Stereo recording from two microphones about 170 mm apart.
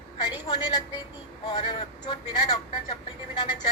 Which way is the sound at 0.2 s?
25° left (ahead or behind).